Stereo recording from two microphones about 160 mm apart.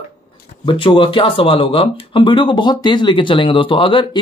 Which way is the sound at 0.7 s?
30° left (ahead or behind).